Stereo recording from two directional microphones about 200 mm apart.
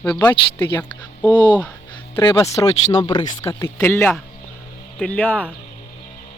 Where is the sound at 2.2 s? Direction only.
25° left (ahead or behind); by 5.4 s 5° left (ahead or behind).